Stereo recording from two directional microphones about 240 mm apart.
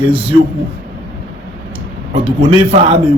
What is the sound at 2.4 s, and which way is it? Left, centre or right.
Speech, right.